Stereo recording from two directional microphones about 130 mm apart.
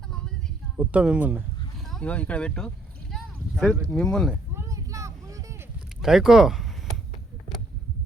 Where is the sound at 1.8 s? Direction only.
5° left (ahead or behind).